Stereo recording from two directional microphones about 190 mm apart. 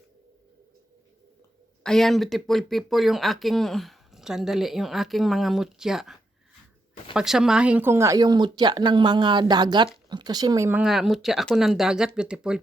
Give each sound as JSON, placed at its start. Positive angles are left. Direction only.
{"t": 1.8, "sound": "speech", "side_deg": 0}